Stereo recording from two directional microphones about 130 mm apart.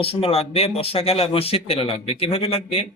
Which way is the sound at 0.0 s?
45° left (ahead or behind).